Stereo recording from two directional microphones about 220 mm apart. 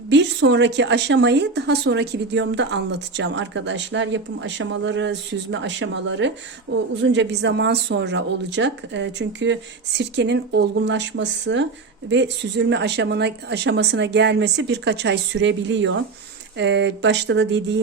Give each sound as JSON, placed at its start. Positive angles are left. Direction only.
{"t": 0.1, "sound": "speech", "side_deg": -55}